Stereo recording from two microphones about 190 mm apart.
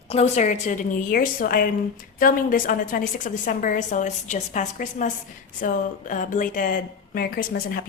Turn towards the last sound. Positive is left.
turn(degrees=50)  # may be behind; listen again after turning